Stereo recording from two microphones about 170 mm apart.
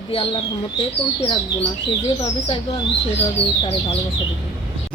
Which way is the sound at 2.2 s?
35° left (ahead or behind).